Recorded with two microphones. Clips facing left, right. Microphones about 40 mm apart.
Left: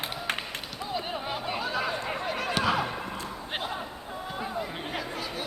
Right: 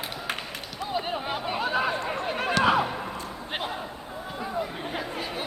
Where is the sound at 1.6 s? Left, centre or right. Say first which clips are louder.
Right 6 dB; right.